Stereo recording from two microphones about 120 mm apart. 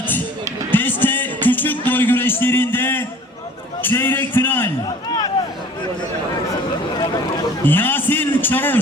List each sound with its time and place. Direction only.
0.7 s music: 15° left (ahead or behind)
3.8 s a man's voice: 15° left (ahead or behind)
7.6 s a man's voice: 15° left (ahead or behind)